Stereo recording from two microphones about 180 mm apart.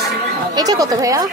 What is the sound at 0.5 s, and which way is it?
Speech, 20° right (ahead or behind).